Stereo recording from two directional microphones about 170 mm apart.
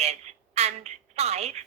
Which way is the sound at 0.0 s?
40° right (ahead or behind).